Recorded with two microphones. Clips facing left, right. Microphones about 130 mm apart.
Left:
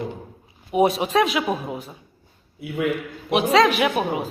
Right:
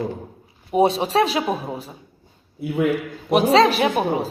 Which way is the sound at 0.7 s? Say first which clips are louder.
Right 1 dB; 30° right (ahead or behind).